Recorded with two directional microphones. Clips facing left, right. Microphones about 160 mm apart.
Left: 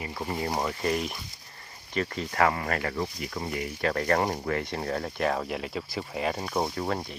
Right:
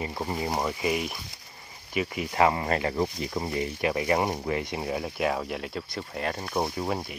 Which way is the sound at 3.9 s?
10° right (ahead or behind).